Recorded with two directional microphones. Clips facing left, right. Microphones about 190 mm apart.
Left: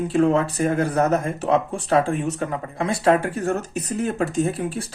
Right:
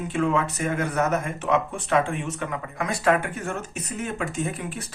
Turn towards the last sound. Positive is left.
turn(degrees=30)  # may be behind; listen again after turning